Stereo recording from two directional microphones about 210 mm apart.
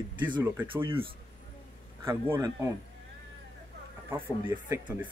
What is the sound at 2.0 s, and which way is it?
Speech, 10° right (ahead or behind).